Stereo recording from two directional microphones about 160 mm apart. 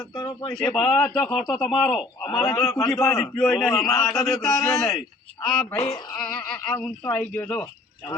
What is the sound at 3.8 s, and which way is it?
A man's voice, centre (ahead or behind).